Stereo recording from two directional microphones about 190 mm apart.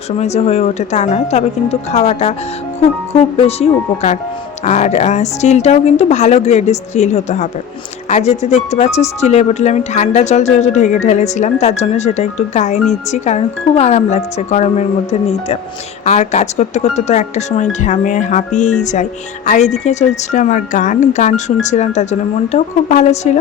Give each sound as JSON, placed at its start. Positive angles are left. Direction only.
{"t": 0.2, "sound": "speech", "side_deg": 35}
{"t": 16.0, "sound": "speech", "side_deg": 35}